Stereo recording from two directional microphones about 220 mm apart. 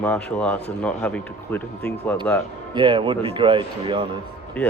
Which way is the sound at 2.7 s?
20° right (ahead or behind).